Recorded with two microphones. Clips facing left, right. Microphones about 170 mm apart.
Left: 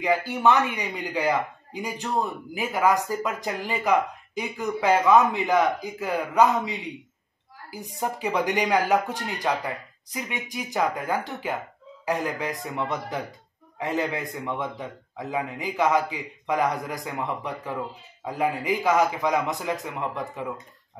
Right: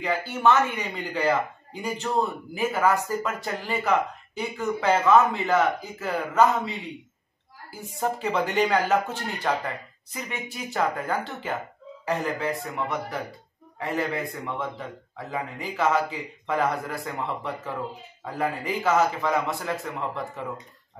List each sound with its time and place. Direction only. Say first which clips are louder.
0.0 s speech: left 1 dB; 15° left (ahead or behind)